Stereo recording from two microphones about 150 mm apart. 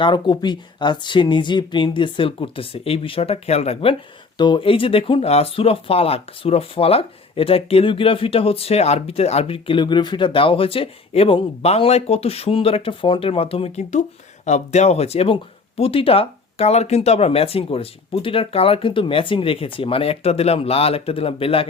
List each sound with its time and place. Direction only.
0.0 s speech: 30° left (ahead or behind)